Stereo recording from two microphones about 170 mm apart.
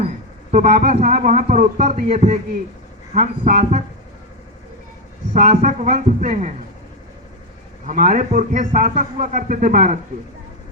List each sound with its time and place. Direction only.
0.5 s a man's voice: 45° right (ahead or behind)
5.3 s a man's voice: 45° right (ahead or behind)
7.9 s a man's voice: 50° right (ahead or behind)